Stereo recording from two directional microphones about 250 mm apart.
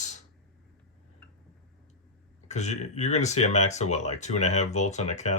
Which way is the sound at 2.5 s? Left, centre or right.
Left.